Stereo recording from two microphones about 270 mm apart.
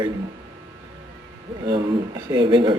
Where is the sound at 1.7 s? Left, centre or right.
Centre.